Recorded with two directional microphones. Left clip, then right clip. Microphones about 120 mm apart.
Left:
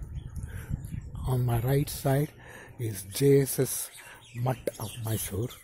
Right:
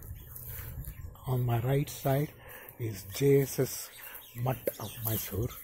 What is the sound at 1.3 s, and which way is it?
Speech, 45° left (ahead or behind).